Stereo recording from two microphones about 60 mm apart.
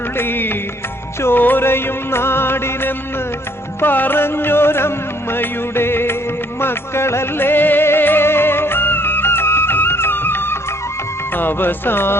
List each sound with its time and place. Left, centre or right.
0.2 s speech: left
1.2 s music: left
11.3 s speech: left